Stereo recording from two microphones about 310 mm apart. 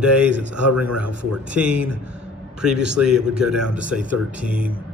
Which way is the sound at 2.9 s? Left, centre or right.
Centre.